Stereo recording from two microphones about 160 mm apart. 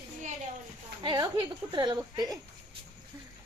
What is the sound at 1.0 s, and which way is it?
A woman's voice, 30° right (ahead or behind).